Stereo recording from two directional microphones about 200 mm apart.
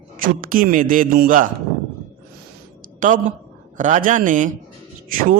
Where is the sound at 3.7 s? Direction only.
40° right (ahead or behind).